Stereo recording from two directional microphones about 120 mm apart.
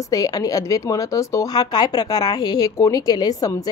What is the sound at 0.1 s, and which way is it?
A woman's voice, 30° left (ahead or behind).